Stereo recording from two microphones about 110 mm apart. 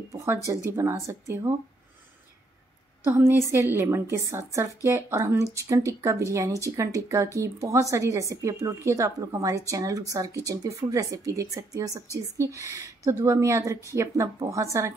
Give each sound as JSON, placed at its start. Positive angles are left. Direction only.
{"t": 0.5, "sound": "speech", "side_deg": -25}
{"t": 3.0, "sound": "speech", "side_deg": -20}